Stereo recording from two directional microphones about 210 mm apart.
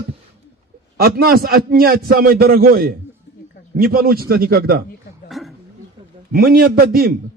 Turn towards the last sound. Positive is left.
turn(degrees=-45)  # may be behind; listen again after turning